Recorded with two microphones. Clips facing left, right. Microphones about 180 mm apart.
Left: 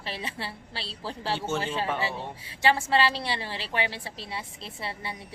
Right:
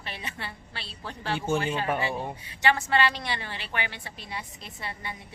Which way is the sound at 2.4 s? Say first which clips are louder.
Left 2 dB; 30° left (ahead or behind).